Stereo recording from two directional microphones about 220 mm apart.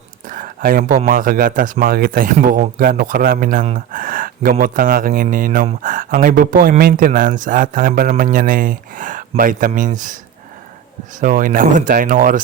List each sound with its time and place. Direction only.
0.3 s a man's voice: 40° right (ahead or behind)
11.2 s a man's voice: 35° right (ahead or behind)